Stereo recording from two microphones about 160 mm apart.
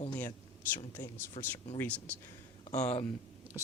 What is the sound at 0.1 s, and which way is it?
Speech, 15° left (ahead or behind).